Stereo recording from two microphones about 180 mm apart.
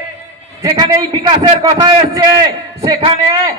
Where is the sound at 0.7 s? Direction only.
20° right (ahead or behind).